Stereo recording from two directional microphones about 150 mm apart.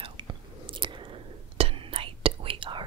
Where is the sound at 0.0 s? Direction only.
30° right (ahead or behind).